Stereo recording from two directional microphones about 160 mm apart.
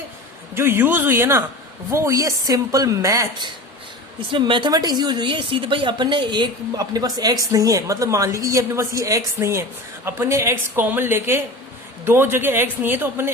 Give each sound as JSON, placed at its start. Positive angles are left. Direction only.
{"t": 0.5, "sound": "a woman's voice", "side_deg": -15}
{"t": 4.3, "sound": "a woman's voice", "side_deg": -30}